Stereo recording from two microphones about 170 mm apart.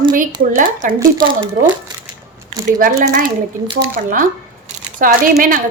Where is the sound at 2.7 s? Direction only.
55° right (ahead or behind).